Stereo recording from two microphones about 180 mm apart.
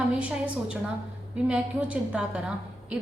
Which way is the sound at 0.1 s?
5° right (ahead or behind).